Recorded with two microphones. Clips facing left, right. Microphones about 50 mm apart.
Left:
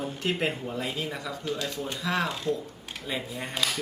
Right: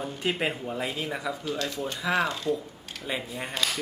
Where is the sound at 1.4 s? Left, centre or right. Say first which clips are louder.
Right 1 dB; centre.